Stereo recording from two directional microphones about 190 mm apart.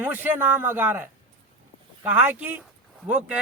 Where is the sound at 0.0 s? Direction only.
10° right (ahead or behind).